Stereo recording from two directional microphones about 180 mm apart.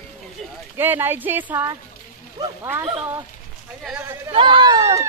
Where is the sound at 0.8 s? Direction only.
10° right (ahead or behind).